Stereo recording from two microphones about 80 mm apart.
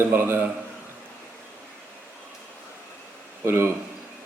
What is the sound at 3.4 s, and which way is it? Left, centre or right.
Speech, right.